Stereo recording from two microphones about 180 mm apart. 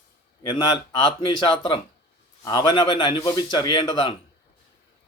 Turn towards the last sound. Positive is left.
turn(degrees=25)  # may be behind; listen again after turning